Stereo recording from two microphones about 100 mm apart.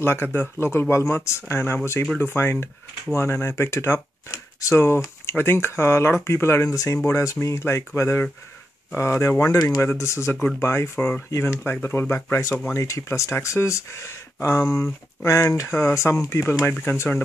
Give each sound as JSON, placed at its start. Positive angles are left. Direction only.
{"t": 0.0, "sound": "speech", "side_deg": 25}
{"t": 9.8, "sound": "speech", "side_deg": 25}